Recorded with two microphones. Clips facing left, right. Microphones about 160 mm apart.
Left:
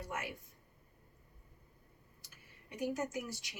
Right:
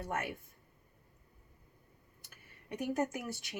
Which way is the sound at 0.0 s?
55° right (ahead or behind).